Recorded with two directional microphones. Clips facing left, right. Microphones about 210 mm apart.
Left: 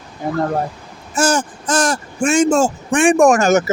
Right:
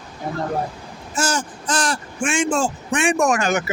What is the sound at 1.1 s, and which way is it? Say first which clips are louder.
Speech: left 6 dB; 50° left (ahead or behind).